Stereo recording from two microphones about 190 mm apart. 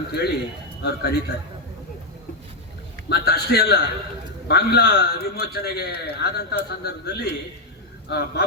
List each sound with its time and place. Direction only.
0.1 s a man's voice: 60° left (ahead or behind)
3.1 s a man's voice: 60° left (ahead or behind)